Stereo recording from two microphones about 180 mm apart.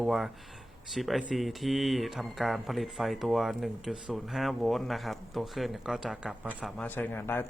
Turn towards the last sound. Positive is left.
turn(degrees=10)  # may be behind; listen again after turning